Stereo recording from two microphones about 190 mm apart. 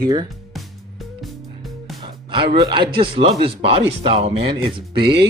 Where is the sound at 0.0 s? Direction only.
20° right (ahead or behind).